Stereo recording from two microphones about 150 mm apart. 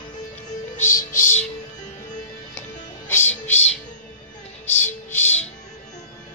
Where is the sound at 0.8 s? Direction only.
20° left (ahead or behind).